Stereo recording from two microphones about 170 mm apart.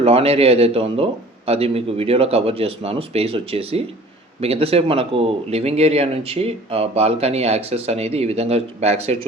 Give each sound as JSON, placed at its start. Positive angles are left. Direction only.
{"t": 0.0, "sound": "speech", "side_deg": -35}